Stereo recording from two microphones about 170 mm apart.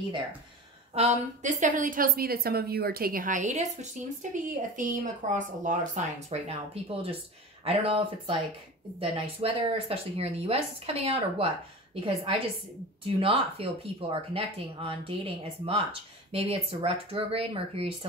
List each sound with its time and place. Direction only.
0.9 s a woman's voice: 45° right (ahead or behind)